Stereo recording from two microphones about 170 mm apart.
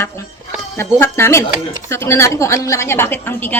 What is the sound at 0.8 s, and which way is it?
A woman's voice, 15° left (ahead or behind).